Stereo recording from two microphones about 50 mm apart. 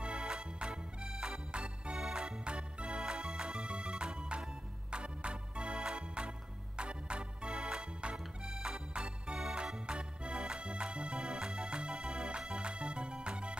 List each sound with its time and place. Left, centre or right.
0.0 s music: centre
2.4 s music: right